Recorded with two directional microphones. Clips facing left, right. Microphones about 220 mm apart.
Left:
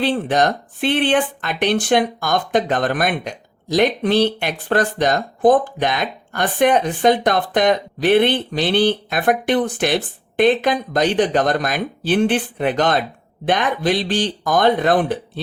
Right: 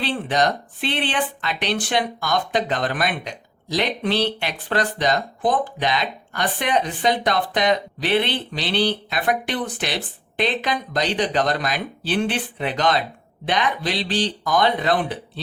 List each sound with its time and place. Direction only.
0.0 s speech: 50° left (ahead or behind)